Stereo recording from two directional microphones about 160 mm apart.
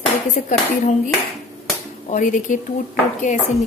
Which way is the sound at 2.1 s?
55° left (ahead or behind).